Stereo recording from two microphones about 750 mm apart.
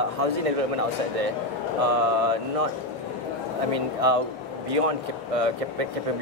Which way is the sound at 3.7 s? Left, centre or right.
Right.